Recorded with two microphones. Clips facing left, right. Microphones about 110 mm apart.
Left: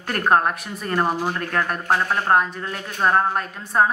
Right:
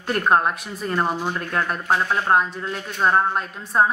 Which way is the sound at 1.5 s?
45° left (ahead or behind).